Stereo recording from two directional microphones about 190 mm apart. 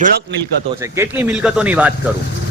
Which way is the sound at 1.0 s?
10° right (ahead or behind).